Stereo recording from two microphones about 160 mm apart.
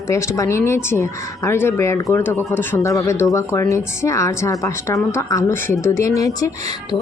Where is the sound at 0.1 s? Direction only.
20° left (ahead or behind).